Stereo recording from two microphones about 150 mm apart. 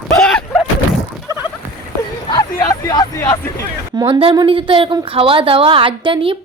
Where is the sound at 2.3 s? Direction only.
25° left (ahead or behind).